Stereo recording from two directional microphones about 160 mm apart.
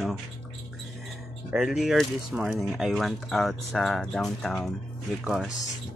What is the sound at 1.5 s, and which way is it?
Speech, 5° right (ahead or behind).